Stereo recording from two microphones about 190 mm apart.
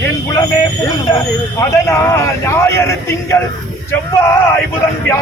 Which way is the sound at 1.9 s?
15° left (ahead or behind).